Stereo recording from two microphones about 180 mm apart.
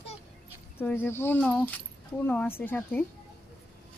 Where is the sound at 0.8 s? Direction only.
10° left (ahead or behind).